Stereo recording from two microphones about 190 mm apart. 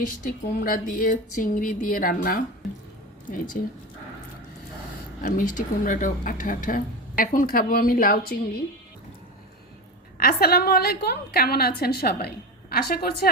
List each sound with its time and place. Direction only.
0.2 s speech: 50° left (ahead or behind)
3.6 s speech: 45° left (ahead or behind)
5.2 s speech: 45° left (ahead or behind)
10.2 s speech: 50° left (ahead or behind)